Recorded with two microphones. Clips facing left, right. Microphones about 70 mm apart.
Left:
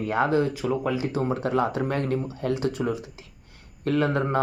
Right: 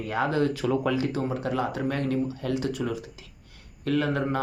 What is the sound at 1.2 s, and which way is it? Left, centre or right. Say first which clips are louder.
Speech: left 3 dB; left.